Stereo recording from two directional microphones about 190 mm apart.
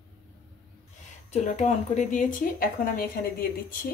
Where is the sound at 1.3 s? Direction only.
40° left (ahead or behind).